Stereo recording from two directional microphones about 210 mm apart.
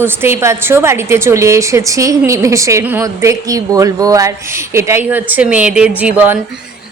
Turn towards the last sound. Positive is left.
turn(degrees=-5)  # may be behind; listen again after turning